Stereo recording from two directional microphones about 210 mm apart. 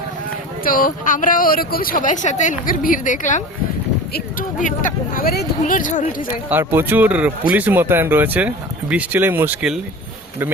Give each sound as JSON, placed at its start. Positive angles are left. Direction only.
{"t": 0.6, "sound": "speech", "side_deg": 40}
{"t": 6.5, "sound": "speech", "side_deg": -10}